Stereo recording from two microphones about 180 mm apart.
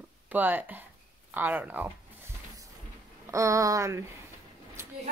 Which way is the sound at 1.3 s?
10° right (ahead or behind).